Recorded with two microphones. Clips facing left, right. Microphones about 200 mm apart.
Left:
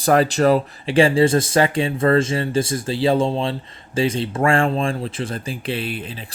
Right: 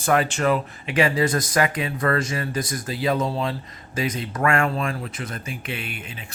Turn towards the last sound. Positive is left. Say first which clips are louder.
# left 7 dB
turn(degrees=35)  # may be behind; listen again after turning